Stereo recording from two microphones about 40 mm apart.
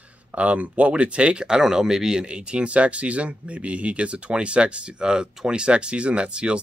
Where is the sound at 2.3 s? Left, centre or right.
Right.